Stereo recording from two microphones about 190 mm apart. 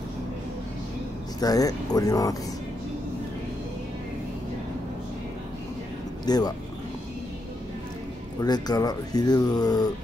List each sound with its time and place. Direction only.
1.4 s speech: 20° left (ahead or behind)
6.2 s speech: 20° left (ahead or behind)
8.4 s speech: 20° left (ahead or behind)